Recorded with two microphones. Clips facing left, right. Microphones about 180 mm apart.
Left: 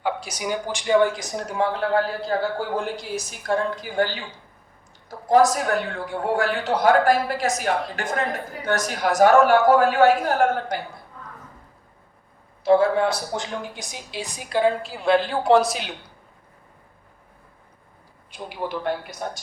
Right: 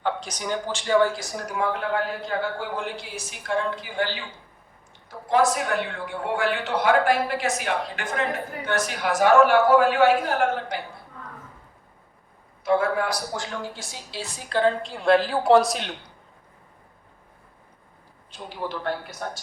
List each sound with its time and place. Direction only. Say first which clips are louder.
0.0 s speech: left 1 dB; 10° left (ahead or behind); by 10.8 s 40° left (ahead or behind)
12.6 s speech: left 5 dB; 30° left (ahead or behind); by 16.1 s 5° left (ahead or behind)
18.3 s speech: left 2 dB; 15° left (ahead or behind)